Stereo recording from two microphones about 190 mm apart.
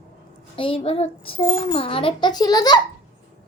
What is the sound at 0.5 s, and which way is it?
A woman's voice, 30° left (ahead or behind).